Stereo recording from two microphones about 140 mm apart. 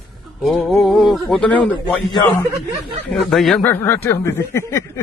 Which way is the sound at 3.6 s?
15° left (ahead or behind).